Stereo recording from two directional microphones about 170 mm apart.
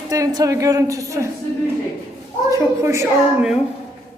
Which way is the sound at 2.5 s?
15° right (ahead or behind).